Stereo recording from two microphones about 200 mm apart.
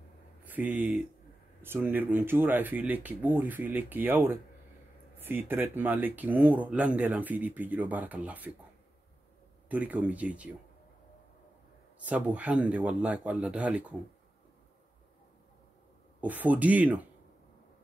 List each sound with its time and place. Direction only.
0.4 s speech: 10° right (ahead or behind)
9.7 s speech: 5° right (ahead or behind)
12.0 s speech: 5° right (ahead or behind)
16.2 s speech: 10° right (ahead or behind)